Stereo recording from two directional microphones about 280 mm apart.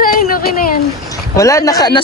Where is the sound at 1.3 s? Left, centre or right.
Centre.